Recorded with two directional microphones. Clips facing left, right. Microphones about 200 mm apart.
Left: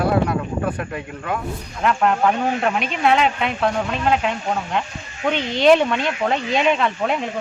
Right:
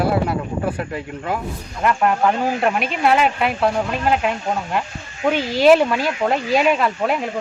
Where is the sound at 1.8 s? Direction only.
5° right (ahead or behind).